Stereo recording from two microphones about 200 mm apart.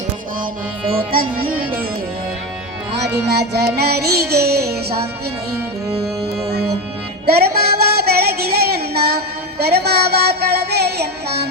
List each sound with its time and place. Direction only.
0.9 s music: 45° right (ahead or behind)
1.5 s music: 10° right (ahead or behind)
2.9 s music: 55° right (ahead or behind)
7.3 s music: 50° right (ahead or behind)